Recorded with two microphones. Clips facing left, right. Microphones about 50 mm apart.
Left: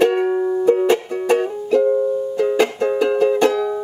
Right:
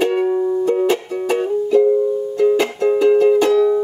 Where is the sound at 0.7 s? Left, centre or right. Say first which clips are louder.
Left 2 dB; centre.